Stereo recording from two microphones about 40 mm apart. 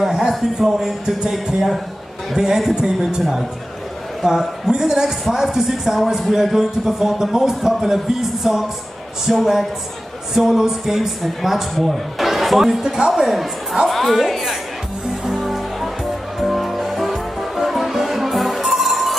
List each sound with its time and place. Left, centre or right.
0.0 s a sound: centre
0.7 s a man's voice: centre
2.3 s a man's voice: centre
4.2 s a woman's voice: centre
15.2 s music: centre